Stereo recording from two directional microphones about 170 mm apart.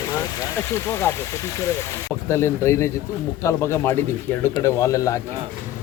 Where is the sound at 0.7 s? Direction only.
15° left (ahead or behind).